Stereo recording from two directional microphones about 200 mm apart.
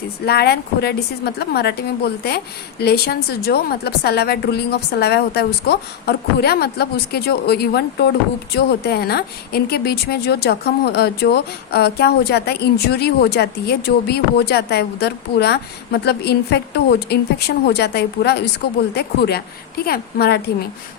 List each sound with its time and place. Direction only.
0.3 s a woman's voice: 50° left (ahead or behind)